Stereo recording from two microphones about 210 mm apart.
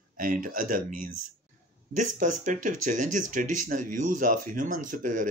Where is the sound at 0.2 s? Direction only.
40° right (ahead or behind).